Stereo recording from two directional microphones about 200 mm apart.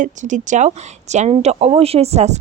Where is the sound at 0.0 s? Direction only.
40° right (ahead or behind).